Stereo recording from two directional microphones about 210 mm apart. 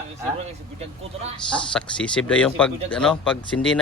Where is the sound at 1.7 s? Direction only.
5° left (ahead or behind).